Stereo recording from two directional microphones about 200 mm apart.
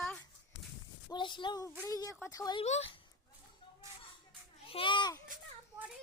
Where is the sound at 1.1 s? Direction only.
25° left (ahead or behind).